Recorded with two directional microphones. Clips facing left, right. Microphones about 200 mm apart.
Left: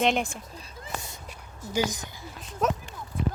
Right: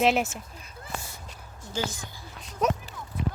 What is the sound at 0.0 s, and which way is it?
Speech, 5° right (ahead or behind).